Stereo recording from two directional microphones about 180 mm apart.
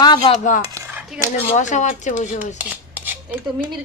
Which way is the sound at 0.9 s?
10° right (ahead or behind).